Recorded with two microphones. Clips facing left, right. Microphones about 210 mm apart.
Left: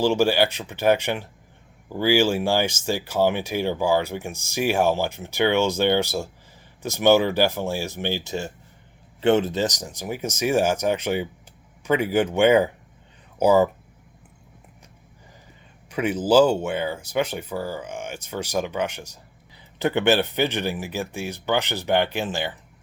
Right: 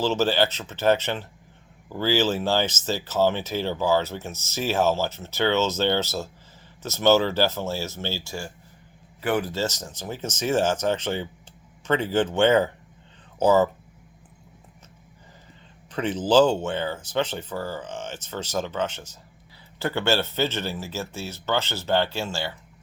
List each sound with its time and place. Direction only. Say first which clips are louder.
0.0 s speech: left 3 dB; 10° left (ahead or behind)
15.9 s speech: left 2 dB; 10° left (ahead or behind)